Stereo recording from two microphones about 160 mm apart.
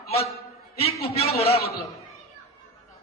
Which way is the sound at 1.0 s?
40° left (ahead or behind).